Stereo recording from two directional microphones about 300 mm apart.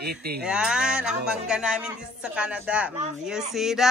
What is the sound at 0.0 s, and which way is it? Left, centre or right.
Speech, right.